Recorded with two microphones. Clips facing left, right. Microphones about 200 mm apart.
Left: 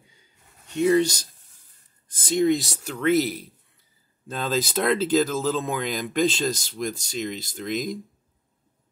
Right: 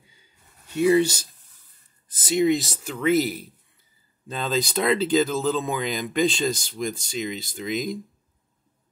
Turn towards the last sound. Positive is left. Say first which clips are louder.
# even
turn(degrees=0)  # may be behind; listen again after turning